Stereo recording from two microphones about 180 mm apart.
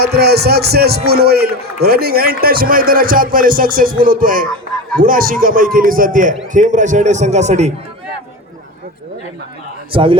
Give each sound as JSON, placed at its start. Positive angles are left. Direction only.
{"t": 0.0, "sound": "a man's voice", "side_deg": -60}
{"t": 9.9, "sound": "a man's voice", "side_deg": -30}